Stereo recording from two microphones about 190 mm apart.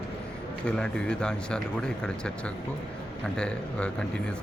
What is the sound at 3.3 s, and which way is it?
Speech, 5° left (ahead or behind).